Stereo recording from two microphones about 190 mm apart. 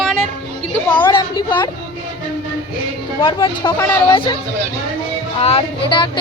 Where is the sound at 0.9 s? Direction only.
25° left (ahead or behind).